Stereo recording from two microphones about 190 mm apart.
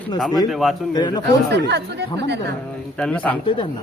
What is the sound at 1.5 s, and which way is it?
Speech, 65° right (ahead or behind).